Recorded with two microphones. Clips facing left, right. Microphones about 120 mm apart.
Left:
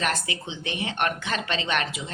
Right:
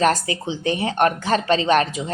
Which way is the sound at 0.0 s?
35° right (ahead or behind).